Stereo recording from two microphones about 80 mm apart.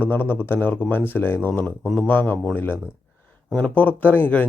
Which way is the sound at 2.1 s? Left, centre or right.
Left.